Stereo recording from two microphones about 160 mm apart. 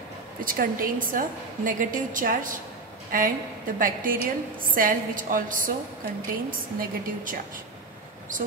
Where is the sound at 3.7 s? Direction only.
60° right (ahead or behind).